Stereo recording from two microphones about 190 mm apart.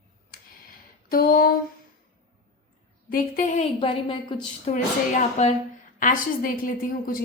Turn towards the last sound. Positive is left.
turn(degrees=50)  # may be behind; listen again after turning